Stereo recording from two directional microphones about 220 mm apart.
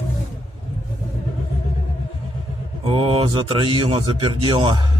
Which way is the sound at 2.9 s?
25° right (ahead or behind).